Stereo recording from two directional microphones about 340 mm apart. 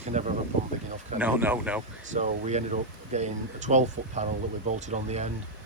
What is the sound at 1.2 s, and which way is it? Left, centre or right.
Speech, centre.